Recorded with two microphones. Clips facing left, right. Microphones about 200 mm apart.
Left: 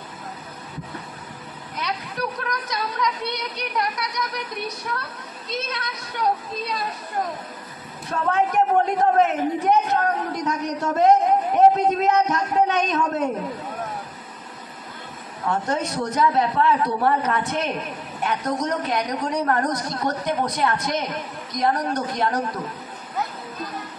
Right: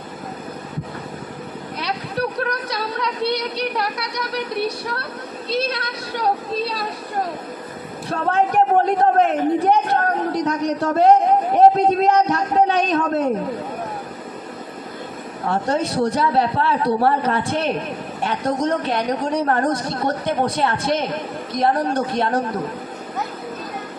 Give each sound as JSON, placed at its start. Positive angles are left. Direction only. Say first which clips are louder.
{"t": 1.8, "sound": "a sound", "louder": "right 4 dB", "side_deg": -30}
{"t": 5.5, "sound": "a man's voice", "louder": "right 6 dB", "side_deg": -30}
{"t": 8.1, "sound": "a man's voice", "louder": "right 2 dB", "side_deg": -30}
{"t": 15.4, "sound": "a man's voice", "louder": "right 3 dB", "side_deg": -30}